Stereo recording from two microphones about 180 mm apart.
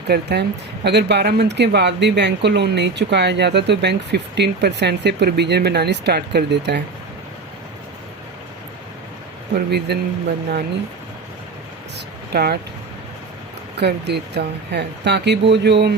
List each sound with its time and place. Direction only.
0.1 s speech: 65° right (ahead or behind)
9.6 s a man's voice: 65° right (ahead or behind)
12.3 s a man's voice: 60° right (ahead or behind)
13.7 s speech: 65° right (ahead or behind)